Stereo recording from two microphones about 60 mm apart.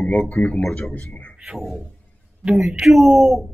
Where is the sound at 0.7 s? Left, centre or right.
Centre.